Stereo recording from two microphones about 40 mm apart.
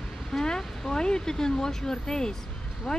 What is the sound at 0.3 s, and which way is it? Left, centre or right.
Speech, centre.